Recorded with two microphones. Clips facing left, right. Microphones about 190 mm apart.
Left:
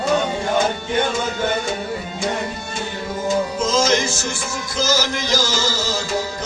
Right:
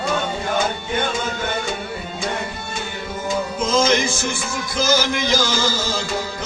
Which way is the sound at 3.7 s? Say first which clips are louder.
Right 2 dB; 55° right (ahead or behind).